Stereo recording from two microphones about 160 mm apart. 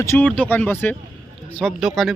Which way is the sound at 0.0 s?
15° left (ahead or behind).